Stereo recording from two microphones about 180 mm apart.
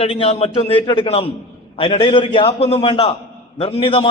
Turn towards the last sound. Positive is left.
turn(degrees=30)  # may be behind; listen again after turning